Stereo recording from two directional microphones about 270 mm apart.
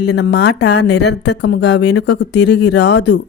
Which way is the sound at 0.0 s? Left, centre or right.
Left.